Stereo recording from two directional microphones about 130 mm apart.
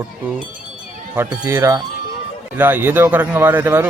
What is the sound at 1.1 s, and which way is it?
A man's voice, 20° right (ahead or behind).